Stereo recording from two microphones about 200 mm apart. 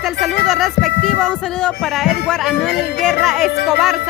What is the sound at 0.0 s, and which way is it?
Speech, centre (ahead or behind).